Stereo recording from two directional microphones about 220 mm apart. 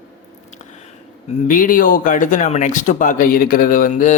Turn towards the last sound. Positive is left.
turn(degrees=35)  # may be behind; listen again after turning